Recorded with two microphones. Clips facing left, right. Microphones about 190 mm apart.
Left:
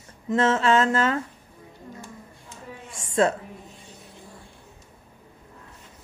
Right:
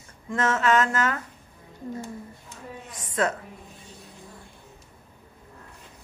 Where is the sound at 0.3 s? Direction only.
25° left (ahead or behind).